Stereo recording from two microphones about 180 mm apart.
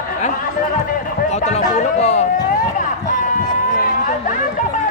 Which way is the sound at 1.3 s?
40° left (ahead or behind).